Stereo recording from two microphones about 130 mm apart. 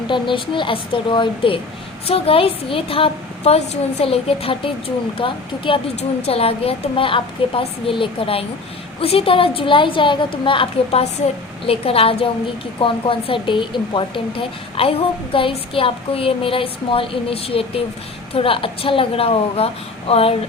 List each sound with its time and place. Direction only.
0.1 s a woman's voice: 40° left (ahead or behind)